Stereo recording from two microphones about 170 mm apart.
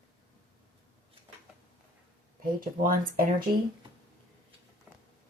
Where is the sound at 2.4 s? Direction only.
55° right (ahead or behind).